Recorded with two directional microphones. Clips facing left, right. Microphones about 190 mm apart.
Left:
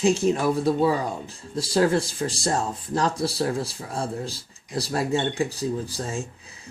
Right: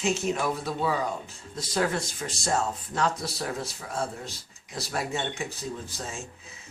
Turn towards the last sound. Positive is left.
turn(degrees=35)  # may be behind; listen again after turning